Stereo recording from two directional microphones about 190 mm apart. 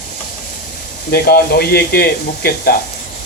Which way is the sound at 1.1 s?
55° left (ahead or behind).